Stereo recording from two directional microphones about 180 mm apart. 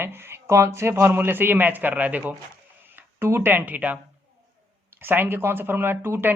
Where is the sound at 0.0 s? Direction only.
15° right (ahead or behind).